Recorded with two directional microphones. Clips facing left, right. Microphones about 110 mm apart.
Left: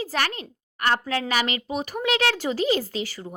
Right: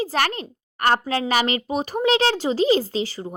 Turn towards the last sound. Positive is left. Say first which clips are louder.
# right 5 dB
turn(degrees=-30)  # may be behind; listen again after turning